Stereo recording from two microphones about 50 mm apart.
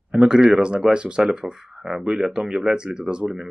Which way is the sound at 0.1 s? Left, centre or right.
Centre.